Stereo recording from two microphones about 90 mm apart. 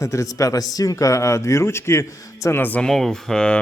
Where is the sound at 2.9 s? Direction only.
5° left (ahead or behind).